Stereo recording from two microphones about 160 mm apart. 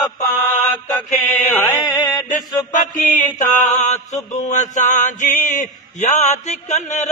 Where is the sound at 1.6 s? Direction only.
25° left (ahead or behind).